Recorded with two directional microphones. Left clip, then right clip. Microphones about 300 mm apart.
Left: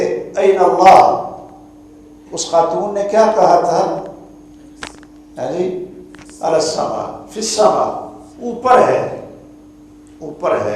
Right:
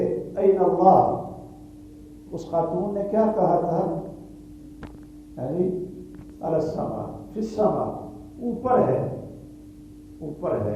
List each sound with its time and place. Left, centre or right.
0.0 s a sound: centre
2.3 s a man's voice: centre
5.4 s a man's voice: centre
7.3 s speech: centre
8.6 s speech: centre
10.4 s a man's voice: centre